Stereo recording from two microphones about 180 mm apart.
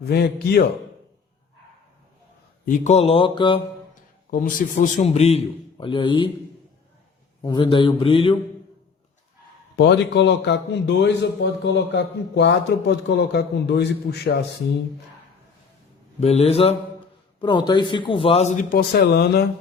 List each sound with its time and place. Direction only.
0.0 s a man's voice: 65° left (ahead or behind)
2.6 s a man's voice: 40° left (ahead or behind)
4.3 s a man's voice: 50° left (ahead or behind); by 6.2 s 25° left (ahead or behind)
7.4 s a man's voice: 25° left (ahead or behind)
9.7 s a man's voice: 75° left (ahead or behind)
16.2 s a man's voice: 35° left (ahead or behind)
18.8 s a man's voice: 60° left (ahead or behind)